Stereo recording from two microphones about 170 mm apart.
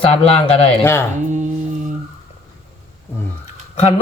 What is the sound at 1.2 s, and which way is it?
Music, 45° right (ahead or behind).